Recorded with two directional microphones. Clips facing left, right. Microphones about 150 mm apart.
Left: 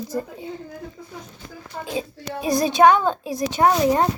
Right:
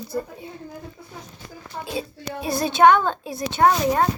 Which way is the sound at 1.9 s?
15° left (ahead or behind).